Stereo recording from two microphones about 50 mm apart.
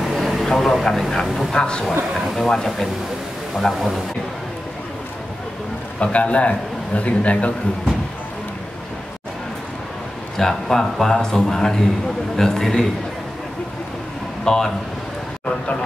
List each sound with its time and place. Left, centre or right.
0.0 s vehicle: centre
1.2 s speech: centre
1.5 s a man's voice: centre
2.1 s a man's voice: centre
5.9 s a man's voice: left
10.3 s a man's voice: centre
14.4 s speech: centre